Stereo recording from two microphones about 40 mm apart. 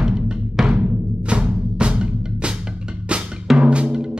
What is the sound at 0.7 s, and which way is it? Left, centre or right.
Music, right.